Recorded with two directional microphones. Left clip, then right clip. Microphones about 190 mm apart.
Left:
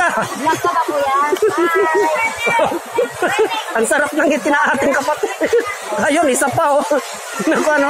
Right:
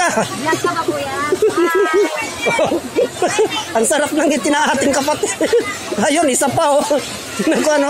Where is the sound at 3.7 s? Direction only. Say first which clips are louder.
Even; 45° right (ahead or behind).